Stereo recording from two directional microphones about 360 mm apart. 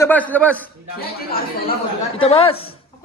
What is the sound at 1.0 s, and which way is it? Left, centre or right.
A man's voice, left.